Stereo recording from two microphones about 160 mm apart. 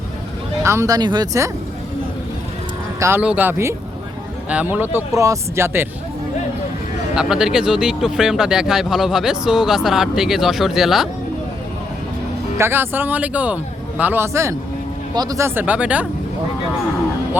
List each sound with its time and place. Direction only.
0.6 s speech: 15° right (ahead or behind)
3.0 s speech: 10° right (ahead or behind)
7.2 s speech: 5° right (ahead or behind)
12.5 s speech: 15° right (ahead or behind)
17.4 s speech: 10° right (ahead or behind)